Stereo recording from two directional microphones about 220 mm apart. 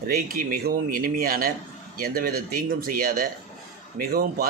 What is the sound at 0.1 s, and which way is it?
Speech, 40° right (ahead or behind).